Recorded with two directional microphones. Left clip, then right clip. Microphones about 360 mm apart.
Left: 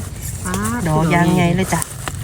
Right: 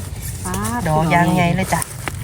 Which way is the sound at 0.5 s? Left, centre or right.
Centre.